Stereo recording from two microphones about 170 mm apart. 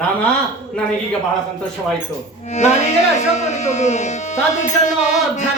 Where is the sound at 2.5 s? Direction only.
40° left (ahead or behind).